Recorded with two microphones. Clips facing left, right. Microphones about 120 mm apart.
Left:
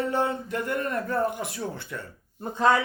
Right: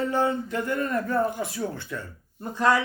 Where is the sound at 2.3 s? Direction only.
25° left (ahead or behind).